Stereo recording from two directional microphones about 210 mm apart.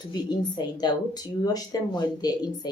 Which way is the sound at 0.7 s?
20° left (ahead or behind).